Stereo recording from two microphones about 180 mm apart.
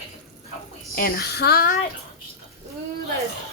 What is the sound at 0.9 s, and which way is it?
Speech, 55° left (ahead or behind).